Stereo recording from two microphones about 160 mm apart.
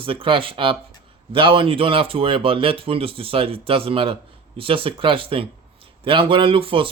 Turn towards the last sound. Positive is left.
turn(degrees=-35)  # may be behind; listen again after turning